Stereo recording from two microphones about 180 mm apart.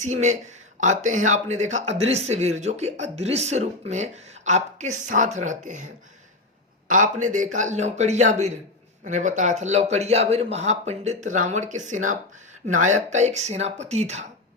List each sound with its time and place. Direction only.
0.0 s speech: 40° right (ahead or behind)